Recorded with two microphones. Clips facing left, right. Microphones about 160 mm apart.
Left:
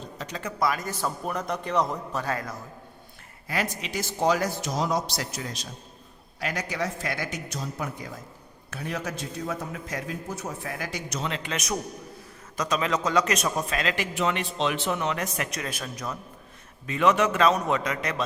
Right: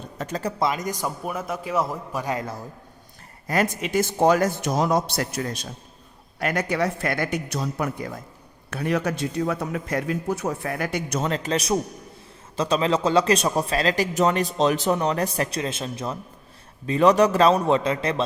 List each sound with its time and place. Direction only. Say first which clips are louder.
0.2 s a sound: right 8 dB; 50° right (ahead or behind)
0.6 s a man's voice: even; 20° right (ahead or behind)
3.4 s a man's voice: right 7 dB; 45° right (ahead or behind); by 18.2 s 30° right (ahead or behind)